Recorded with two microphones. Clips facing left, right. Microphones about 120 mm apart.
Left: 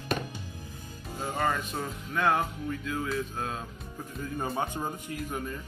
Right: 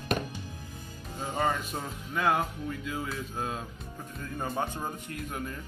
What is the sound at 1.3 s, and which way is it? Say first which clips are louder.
Speech: even; 15° right (ahead or behind).